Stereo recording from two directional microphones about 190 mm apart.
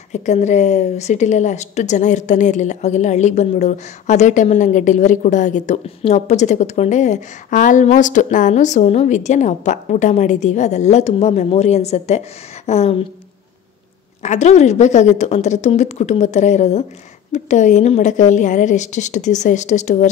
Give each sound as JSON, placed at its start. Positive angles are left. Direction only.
{"t": 0.1, "sound": "a woman's voice", "side_deg": 40}
{"t": 14.2, "sound": "a woman's voice", "side_deg": 35}